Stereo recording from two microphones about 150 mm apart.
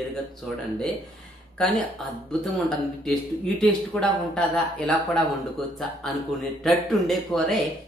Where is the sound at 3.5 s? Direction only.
5° left (ahead or behind).